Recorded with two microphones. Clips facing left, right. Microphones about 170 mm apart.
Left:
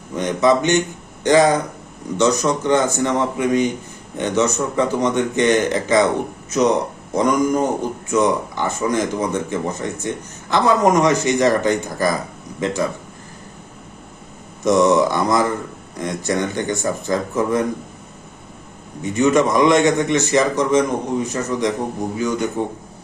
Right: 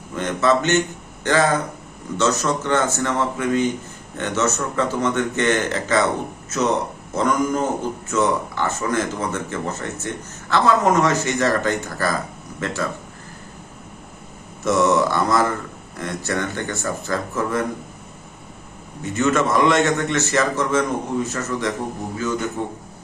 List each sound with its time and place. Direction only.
0.2 s speech: 15° left (ahead or behind)
14.6 s mantra: 15° left (ahead or behind)
16.0 s speech: 15° left (ahead or behind)
19.0 s speech: 15° left (ahead or behind)